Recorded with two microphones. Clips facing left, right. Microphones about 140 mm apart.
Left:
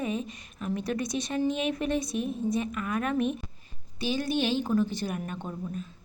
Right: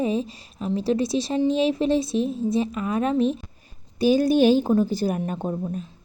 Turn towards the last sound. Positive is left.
turn(degrees=-40)  # may be behind; listen again after turning